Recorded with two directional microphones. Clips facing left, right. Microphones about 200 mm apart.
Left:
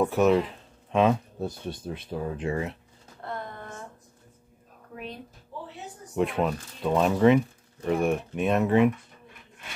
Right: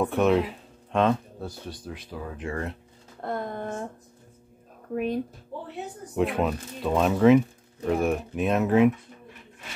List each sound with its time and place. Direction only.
0.0 s speech: centre (ahead or behind)
1.4 s speech: 25° left (ahead or behind)
2.5 s speech: 5° left (ahead or behind)
3.2 s a sound: 45° right (ahead or behind)
4.9 s speech: 50° right (ahead or behind)
6.1 s speech: centre (ahead or behind)